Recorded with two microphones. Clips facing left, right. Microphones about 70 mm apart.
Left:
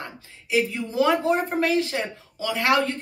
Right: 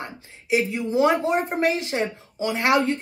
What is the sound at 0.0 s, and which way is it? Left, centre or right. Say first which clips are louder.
Speech: right 2 dB; right.